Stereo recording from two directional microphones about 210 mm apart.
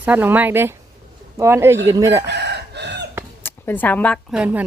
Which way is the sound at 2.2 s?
55° right (ahead or behind).